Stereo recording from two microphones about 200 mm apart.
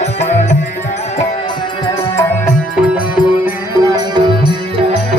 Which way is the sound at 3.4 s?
20° right (ahead or behind).